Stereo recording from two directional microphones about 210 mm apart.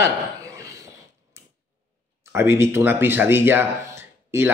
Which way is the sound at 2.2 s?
10° right (ahead or behind).